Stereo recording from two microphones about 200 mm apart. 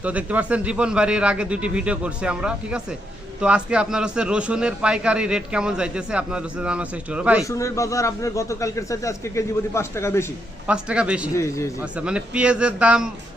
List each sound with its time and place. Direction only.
0.0 s a man's voice: 5° right (ahead or behind)
7.4 s a man's voice: 15° left (ahead or behind)
10.7 s a man's voice: 5° right (ahead or behind)
11.3 s a man's voice: 15° left (ahead or behind)
11.8 s a man's voice: 5° right (ahead or behind)